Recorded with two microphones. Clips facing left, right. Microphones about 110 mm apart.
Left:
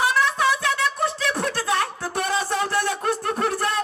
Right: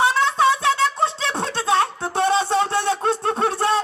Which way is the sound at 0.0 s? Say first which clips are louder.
Right 3 dB; 25° right (ahead or behind).